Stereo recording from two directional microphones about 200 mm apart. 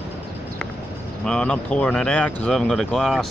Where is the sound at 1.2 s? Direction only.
5° left (ahead or behind).